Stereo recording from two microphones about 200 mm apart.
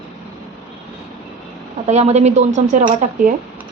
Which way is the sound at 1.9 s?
35° right (ahead or behind).